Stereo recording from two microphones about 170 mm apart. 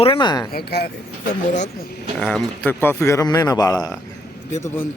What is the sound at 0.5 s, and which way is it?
Speech, 70° left (ahead or behind).